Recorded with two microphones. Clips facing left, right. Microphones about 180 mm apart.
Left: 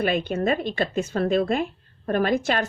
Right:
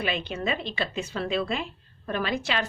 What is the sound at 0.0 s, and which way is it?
Speech, 50° left (ahead or behind).